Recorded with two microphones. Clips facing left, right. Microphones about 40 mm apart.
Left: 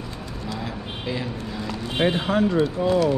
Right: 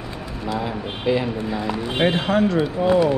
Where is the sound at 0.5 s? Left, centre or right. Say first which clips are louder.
Right 7 dB; centre.